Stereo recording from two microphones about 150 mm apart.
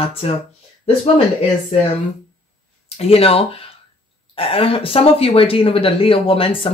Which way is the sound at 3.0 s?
40° left (ahead or behind).